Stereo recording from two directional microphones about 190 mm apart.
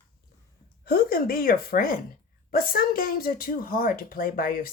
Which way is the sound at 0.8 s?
55° left (ahead or behind).